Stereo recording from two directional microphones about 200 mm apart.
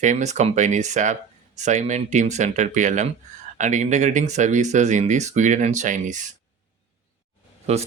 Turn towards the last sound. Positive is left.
turn(degrees=-30)  # may be behind; listen again after turning